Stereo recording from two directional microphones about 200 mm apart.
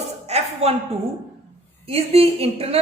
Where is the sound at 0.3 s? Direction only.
35° right (ahead or behind).